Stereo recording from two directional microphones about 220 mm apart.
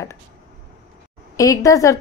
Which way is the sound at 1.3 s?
15° left (ahead or behind).